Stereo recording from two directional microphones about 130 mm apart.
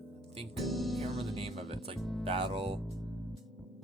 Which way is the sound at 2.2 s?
45° right (ahead or behind).